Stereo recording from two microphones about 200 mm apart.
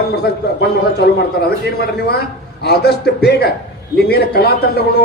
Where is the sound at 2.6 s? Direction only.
55° left (ahead or behind).